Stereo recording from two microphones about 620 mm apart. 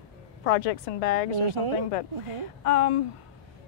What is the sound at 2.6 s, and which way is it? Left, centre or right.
Speech, left.